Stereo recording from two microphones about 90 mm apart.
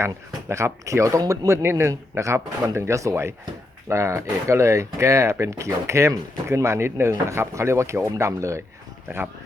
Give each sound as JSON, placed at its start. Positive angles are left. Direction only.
{"t": 0.0, "sound": "speech", "side_deg": -30}